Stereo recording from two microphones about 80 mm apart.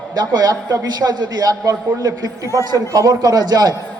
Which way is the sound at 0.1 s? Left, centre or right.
Right.